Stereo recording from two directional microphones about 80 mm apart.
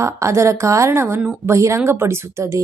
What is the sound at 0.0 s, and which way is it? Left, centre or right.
Speech, right.